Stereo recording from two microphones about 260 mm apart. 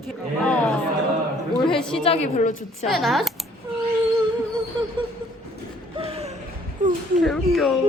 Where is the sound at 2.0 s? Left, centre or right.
Left.